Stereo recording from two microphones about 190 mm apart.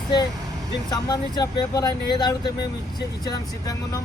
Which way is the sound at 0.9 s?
20° left (ahead or behind).